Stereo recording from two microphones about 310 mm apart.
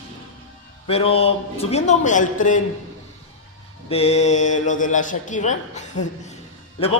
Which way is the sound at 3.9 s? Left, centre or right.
Centre.